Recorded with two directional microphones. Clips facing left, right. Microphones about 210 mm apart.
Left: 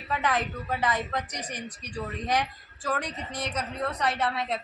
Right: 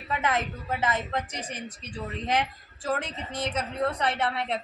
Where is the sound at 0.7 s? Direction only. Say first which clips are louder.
Right 1 dB; 25° right (ahead or behind).